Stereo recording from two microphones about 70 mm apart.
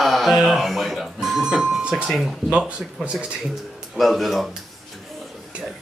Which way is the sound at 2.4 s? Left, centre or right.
Centre.